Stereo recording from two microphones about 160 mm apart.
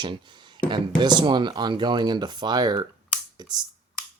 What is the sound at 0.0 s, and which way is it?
Speech, 30° right (ahead or behind).